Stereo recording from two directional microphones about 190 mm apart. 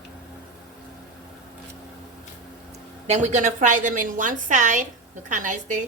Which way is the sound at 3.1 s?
40° right (ahead or behind).